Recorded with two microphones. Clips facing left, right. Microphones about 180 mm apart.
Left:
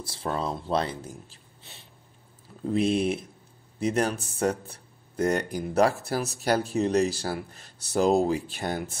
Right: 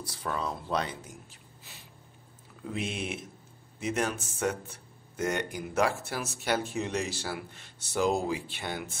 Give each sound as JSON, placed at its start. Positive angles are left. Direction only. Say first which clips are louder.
{"t": 0.0, "sound": "speech", "louder": "left 4 dB", "side_deg": 30}